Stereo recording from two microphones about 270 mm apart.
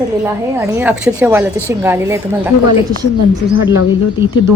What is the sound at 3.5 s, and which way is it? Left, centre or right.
Speech, left.